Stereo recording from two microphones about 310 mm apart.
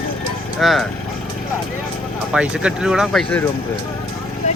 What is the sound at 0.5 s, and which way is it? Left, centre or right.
Speech, centre.